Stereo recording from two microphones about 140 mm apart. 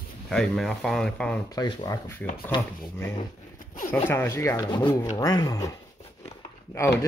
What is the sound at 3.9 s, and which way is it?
Speech, 15° left (ahead or behind).